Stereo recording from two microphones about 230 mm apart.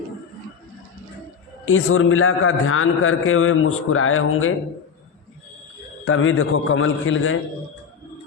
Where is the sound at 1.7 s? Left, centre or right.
Left.